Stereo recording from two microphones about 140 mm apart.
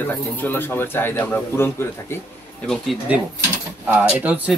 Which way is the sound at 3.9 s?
10° right (ahead or behind).